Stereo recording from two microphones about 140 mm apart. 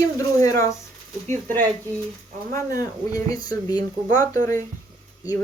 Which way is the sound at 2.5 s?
25° left (ahead or behind).